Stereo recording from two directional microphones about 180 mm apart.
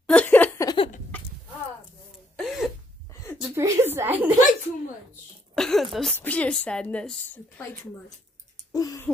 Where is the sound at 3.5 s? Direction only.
15° right (ahead or behind).